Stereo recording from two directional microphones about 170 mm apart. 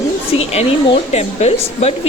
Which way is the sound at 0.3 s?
35° left (ahead or behind).